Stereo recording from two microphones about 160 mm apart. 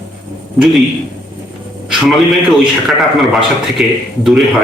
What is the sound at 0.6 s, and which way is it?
Speech, centre (ahead or behind).